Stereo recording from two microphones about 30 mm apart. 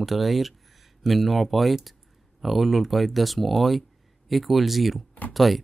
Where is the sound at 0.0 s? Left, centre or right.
Centre.